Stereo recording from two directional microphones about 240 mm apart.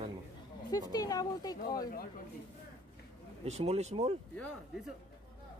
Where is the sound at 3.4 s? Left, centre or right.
Right.